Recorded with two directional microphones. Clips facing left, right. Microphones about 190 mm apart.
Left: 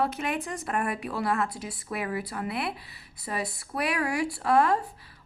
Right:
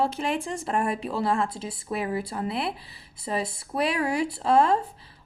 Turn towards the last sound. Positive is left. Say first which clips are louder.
# right 2 dB
turn(degrees=-25)  # may be behind; listen again after turning